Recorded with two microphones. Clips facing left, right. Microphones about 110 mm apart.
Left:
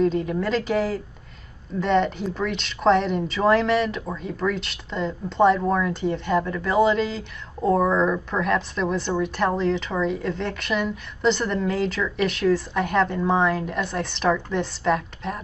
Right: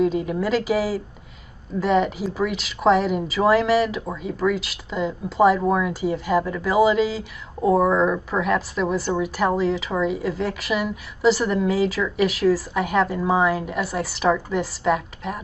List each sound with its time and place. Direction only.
0.0 s speech: 5° right (ahead or behind)